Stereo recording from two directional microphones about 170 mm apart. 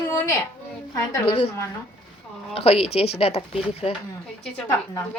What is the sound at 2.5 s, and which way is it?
Speech, 35° left (ahead or behind).